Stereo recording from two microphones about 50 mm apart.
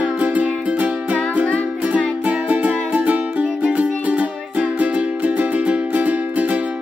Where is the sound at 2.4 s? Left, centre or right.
Right.